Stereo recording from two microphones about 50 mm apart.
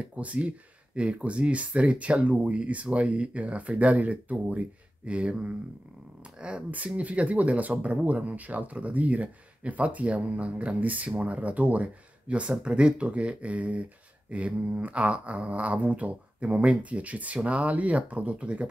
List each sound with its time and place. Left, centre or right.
0.0 s speech: right